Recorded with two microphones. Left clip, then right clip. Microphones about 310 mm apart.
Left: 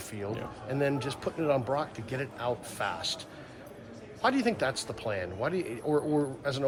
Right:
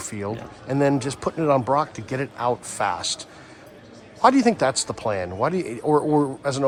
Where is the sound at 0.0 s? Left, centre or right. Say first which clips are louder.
Right 6 dB; right.